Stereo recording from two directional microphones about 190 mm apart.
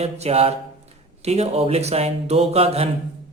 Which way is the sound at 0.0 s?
35° right (ahead or behind).